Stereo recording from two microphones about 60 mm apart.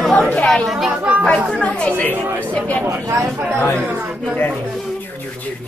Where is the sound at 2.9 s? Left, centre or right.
Right.